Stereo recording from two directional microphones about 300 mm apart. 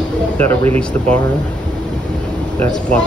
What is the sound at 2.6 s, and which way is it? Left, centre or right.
Speech, centre.